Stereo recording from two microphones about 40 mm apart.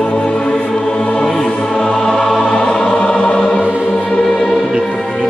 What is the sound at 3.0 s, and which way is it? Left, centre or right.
Choir, left.